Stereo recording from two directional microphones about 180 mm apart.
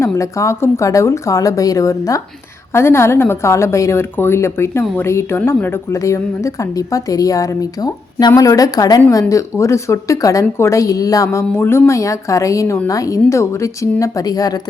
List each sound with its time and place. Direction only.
0.0 s a woman's voice: 15° left (ahead or behind)